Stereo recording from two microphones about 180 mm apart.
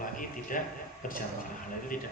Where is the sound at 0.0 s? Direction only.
50° left (ahead or behind).